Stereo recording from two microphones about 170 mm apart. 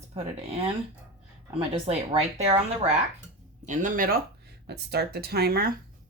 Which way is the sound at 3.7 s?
50° right (ahead or behind).